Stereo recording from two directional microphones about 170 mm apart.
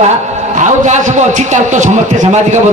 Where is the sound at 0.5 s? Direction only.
45° right (ahead or behind).